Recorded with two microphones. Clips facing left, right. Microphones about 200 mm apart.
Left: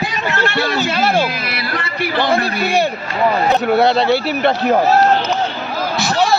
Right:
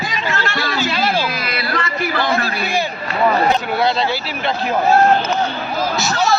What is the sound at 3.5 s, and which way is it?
Speech, 60° left (ahead or behind).